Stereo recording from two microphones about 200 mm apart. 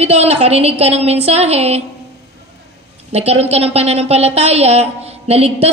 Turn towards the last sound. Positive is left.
turn(degrees=-30)  # may be behind; listen again after turning